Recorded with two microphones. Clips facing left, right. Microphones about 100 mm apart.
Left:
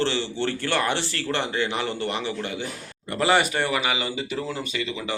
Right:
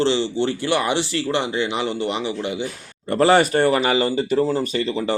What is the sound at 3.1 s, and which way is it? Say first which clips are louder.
Speech: right 6 dB; 35° right (ahead or behind).